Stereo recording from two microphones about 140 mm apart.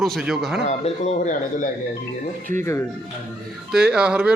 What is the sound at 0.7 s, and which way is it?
Speech, 50° left (ahead or behind).